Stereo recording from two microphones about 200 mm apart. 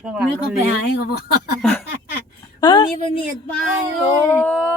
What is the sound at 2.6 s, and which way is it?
Speech, 25° left (ahead or behind).